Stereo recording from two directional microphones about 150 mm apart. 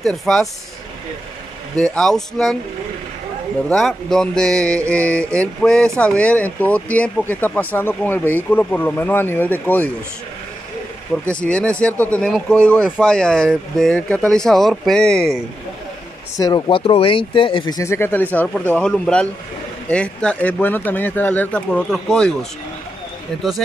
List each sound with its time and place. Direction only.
0.0 s speech: centre (ahead or behind)
1.8 s speech: 5° left (ahead or behind)
3.6 s speech: 5° left (ahead or behind)
11.2 s speech: 5° left (ahead or behind)
16.3 s speech: 25° left (ahead or behind); by 22.5 s 5° left (ahead or behind)